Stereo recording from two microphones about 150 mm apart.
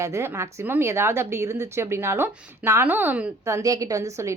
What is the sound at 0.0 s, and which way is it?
Speech, 20° right (ahead or behind).